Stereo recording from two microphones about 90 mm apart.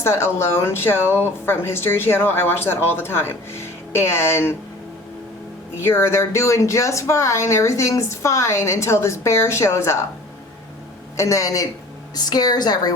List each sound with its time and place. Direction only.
0.0 s speech: 30° left (ahead or behind)
5.8 s speech: 30° left (ahead or behind)
11.2 s a woman's voice: 35° left (ahead or behind)